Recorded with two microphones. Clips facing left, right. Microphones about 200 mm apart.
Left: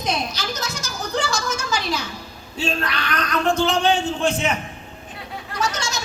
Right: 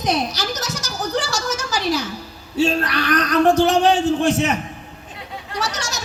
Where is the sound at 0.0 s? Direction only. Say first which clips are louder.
Right 4 dB; 80° right.